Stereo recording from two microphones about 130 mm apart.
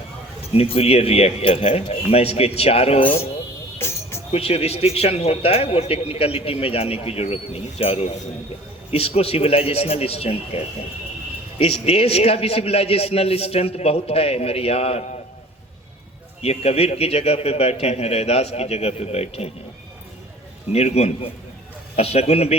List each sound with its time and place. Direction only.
0.5 s a man's voice: 50° left (ahead or behind)
3.8 s music: 20° left (ahead or behind)
4.3 s a man's voice: 50° left (ahead or behind)
11.6 s a man's voice: 50° left (ahead or behind)
16.4 s a man's voice: 55° left (ahead or behind)
20.7 s a man's voice: 55° left (ahead or behind)